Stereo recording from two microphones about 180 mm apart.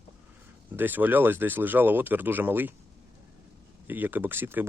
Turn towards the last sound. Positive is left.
turn(degrees=-10)  # may be behind; listen again after turning